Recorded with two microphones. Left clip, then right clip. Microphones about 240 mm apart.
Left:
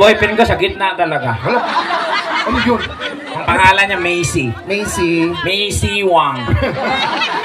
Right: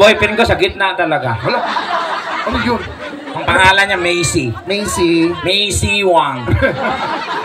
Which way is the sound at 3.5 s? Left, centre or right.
Right.